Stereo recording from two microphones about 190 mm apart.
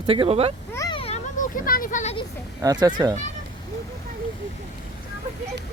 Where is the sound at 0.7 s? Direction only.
20° left (ahead or behind).